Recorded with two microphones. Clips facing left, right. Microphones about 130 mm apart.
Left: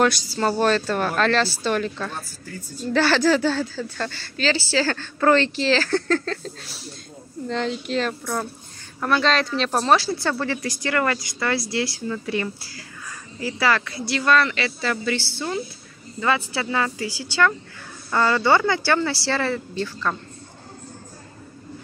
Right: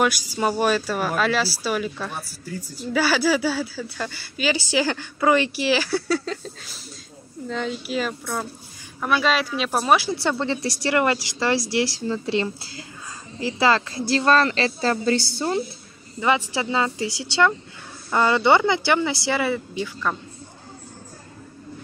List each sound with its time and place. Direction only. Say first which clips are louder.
0.0 s a woman's voice: left 1 dB; 10° right (ahead or behind); by 15.6 s 35° right (ahead or behind)
16.2 s a woman's voice: right 1 dB; 15° right (ahead or behind)